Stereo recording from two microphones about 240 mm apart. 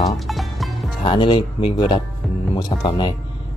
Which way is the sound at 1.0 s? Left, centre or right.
Centre.